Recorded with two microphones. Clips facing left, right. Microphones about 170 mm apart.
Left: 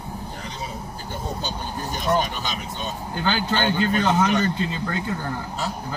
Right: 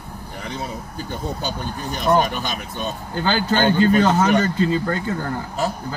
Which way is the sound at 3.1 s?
40° right (ahead or behind).